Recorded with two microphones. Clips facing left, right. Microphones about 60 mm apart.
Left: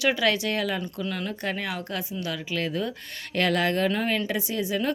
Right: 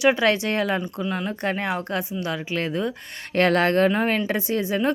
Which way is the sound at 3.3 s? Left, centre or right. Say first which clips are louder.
Right 5 dB; right.